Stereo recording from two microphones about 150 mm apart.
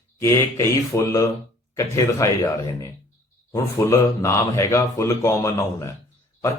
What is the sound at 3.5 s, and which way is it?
Speech, 20° left (ahead or behind).